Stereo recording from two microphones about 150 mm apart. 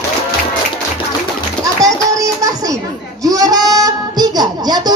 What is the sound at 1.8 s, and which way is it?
Music, 25° right (ahead or behind).